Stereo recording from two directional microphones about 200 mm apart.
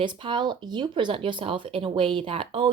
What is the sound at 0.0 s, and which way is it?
A woman's voice, 25° right (ahead or behind).